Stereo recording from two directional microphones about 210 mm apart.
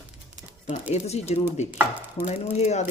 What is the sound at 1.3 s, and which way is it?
Speech, 30° left (ahead or behind).